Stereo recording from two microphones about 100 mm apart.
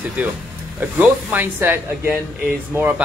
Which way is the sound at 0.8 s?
15° right (ahead or behind).